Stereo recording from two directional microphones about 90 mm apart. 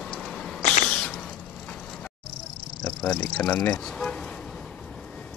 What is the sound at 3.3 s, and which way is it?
Speech, 15° left (ahead or behind).